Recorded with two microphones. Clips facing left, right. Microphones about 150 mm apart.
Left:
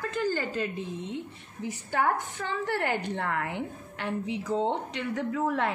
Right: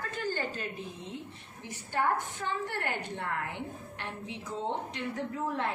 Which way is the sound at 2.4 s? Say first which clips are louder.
Left 4 dB; 90° left.